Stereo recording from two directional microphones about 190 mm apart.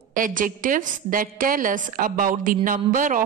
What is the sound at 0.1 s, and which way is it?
A woman's voice, 45° right (ahead or behind).